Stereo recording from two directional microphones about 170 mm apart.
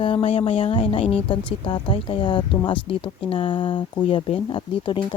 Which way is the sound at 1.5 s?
30° left (ahead or behind).